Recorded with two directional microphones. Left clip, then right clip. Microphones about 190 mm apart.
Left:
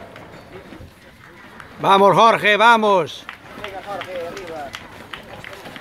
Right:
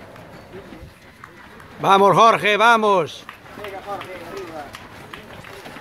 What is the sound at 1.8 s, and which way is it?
A man's voice, centre (ahead or behind).